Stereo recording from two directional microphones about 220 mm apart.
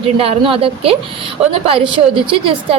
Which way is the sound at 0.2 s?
25° right (ahead or behind).